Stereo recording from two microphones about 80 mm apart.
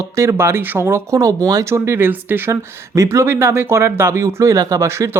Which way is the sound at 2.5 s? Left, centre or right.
Right.